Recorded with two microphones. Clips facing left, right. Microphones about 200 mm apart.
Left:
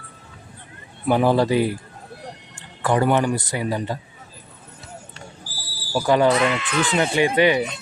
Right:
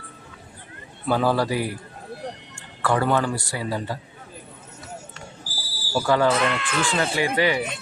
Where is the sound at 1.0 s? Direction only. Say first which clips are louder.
Left 4 dB; 20° left (ahead or behind).